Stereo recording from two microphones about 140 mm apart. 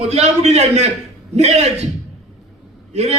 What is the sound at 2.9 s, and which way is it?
Speech, 50° right (ahead or behind).